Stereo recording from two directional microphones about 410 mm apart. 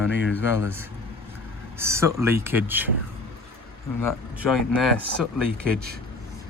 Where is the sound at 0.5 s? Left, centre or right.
Centre.